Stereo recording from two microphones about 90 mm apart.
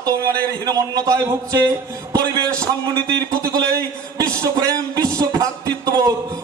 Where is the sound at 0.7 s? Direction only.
45° right (ahead or behind).